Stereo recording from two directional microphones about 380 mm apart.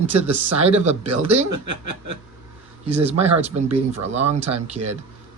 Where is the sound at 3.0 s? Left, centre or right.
Centre.